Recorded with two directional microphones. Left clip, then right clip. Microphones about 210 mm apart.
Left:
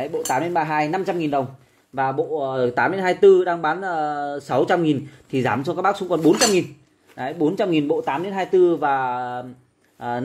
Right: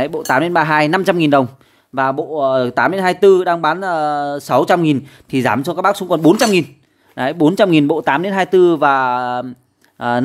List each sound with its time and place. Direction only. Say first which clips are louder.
0.0 s speech: right 7 dB; 35° right (ahead or behind)